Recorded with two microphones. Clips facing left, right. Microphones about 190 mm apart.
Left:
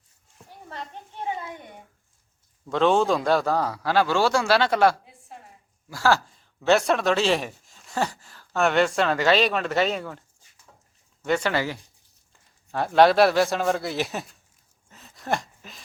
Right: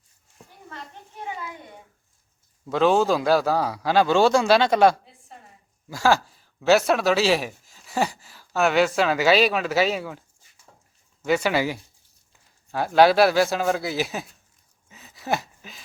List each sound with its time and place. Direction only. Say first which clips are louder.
2.6 s a man's voice: right 1 dB; 5° right (ahead or behind)
6.3 s a man's voice: right 2 dB; 5° right (ahead or behind)
14.8 s a sound: right 1 dB; 5° right (ahead or behind)